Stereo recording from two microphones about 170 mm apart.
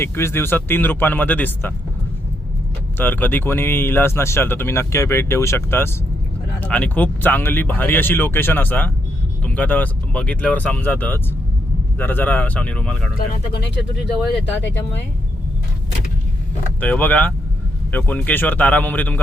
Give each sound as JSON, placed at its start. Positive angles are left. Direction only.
{"t": 0.0, "sound": "speech", "side_deg": 15}
{"t": 3.0, "sound": "speech", "side_deg": 10}
{"t": 13.1, "sound": "speech", "side_deg": 70}
{"t": 16.8, "sound": "speech", "side_deg": 10}